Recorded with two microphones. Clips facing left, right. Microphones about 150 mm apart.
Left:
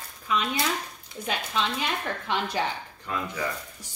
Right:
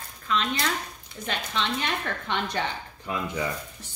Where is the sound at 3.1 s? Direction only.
15° right (ahead or behind).